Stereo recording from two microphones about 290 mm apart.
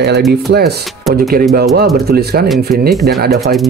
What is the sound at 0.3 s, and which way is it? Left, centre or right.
Speech, right.